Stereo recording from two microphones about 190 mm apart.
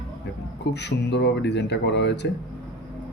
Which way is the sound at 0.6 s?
65° left (ahead or behind).